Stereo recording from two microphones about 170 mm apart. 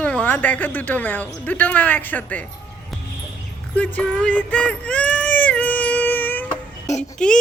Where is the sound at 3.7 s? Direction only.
10° left (ahead or behind).